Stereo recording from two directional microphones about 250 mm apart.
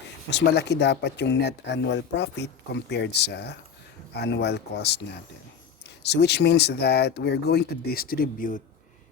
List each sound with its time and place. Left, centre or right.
0.3 s speech: left
6.0 s speech: left